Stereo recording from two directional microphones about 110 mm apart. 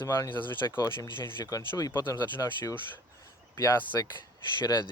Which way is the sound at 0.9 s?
45° left (ahead or behind).